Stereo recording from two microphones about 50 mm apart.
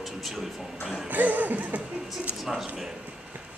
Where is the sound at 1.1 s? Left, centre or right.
Right.